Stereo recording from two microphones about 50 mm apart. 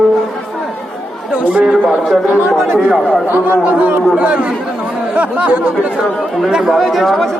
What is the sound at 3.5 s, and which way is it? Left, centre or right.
Speech, right.